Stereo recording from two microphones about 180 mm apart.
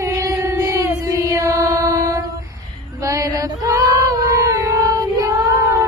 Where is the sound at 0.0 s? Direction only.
15° right (ahead or behind).